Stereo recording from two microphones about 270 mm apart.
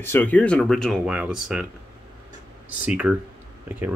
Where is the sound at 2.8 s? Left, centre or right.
Centre.